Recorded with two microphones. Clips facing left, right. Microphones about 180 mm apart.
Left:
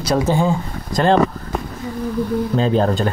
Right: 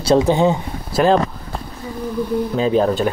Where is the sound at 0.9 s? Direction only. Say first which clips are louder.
Right 1 dB; 5° right (ahead or behind).